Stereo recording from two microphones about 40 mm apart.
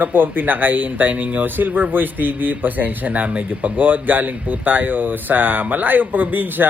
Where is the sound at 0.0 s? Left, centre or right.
Right.